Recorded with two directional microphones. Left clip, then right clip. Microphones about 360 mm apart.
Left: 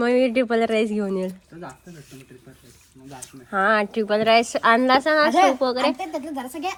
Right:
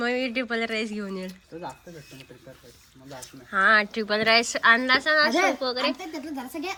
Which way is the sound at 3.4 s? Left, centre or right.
Centre.